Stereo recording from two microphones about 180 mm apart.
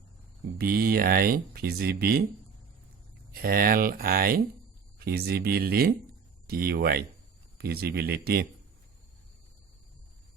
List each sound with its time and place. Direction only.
0.6 s speech: 55° right (ahead or behind)
3.3 s speech: 55° right (ahead or behind)